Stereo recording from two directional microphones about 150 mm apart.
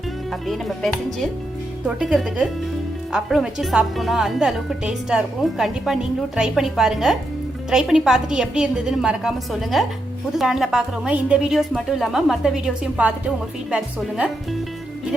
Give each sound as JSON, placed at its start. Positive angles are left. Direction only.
{"t": 0.4, "sound": "speech", "side_deg": 0}